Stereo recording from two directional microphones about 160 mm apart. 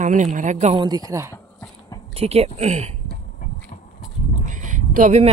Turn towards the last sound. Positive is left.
turn(degrees=-50)  # may be behind; listen again after turning